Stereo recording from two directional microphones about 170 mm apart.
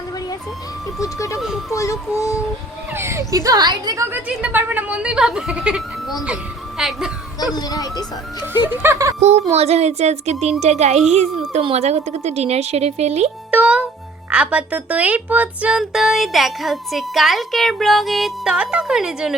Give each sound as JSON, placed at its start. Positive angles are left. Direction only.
{"t": 0.9, "sound": "speech", "side_deg": 20}
{"t": 1.7, "sound": "music", "side_deg": 20}
{"t": 2.9, "sound": "speech", "side_deg": -15}
{"t": 4.1, "sound": "speech", "side_deg": -10}
{"t": 7.5, "sound": "speech", "side_deg": 20}
{"t": 8.7, "sound": "speech", "side_deg": -15}
{"t": 9.2, "sound": "a woman's voice", "side_deg": -40}
{"t": 13.5, "sound": "a child's voice", "side_deg": -10}